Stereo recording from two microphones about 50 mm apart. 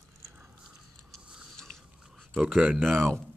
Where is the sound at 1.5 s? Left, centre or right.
Centre.